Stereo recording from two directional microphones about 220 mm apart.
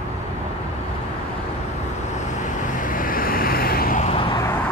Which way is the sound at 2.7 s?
40° left (ahead or behind).